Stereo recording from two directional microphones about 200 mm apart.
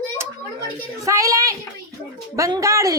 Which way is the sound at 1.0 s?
15° right (ahead or behind).